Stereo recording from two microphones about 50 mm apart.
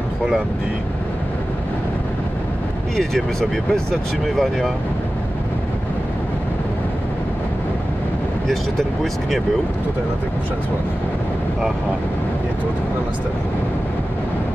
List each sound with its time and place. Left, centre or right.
3.0 s speech: centre
8.5 s speech: centre